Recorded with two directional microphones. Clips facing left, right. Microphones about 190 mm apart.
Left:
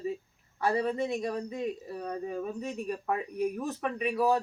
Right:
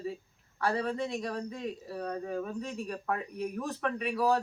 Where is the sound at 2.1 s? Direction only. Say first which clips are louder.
Left 1 dB; 5° left (ahead or behind).